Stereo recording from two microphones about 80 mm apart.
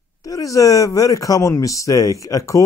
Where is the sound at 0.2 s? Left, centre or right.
Left.